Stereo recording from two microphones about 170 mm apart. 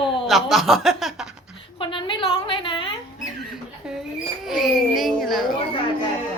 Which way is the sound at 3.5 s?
5° right (ahead or behind).